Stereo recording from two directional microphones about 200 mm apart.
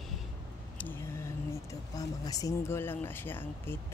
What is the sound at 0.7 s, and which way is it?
Speech, 10° left (ahead or behind).